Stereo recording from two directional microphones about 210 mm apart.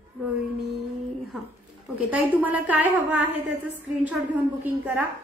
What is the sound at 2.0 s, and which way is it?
A woman's voice, 5° right (ahead or behind).